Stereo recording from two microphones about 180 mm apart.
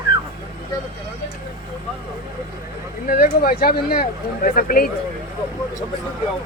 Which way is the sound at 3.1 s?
50° left (ahead or behind).